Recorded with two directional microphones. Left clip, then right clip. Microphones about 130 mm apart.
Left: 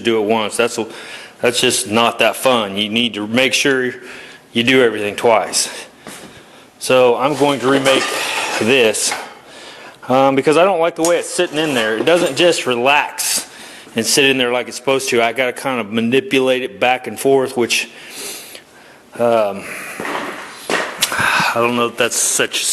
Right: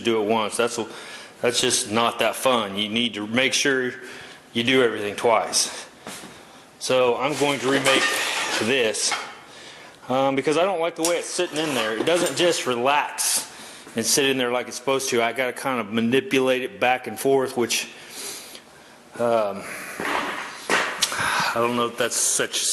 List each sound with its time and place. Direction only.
0.0 s a man's voice: 15° left (ahead or behind)
6.8 s a man's voice: 20° left (ahead or behind)
20.7 s a sound: 25° left (ahead or behind)